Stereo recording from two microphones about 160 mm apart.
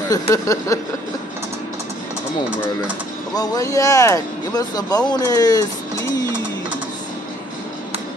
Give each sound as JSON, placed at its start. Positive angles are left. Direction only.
{"t": 0.3, "sound": "speech", "side_deg": 20}
{"t": 3.3, "sound": "speech", "side_deg": 25}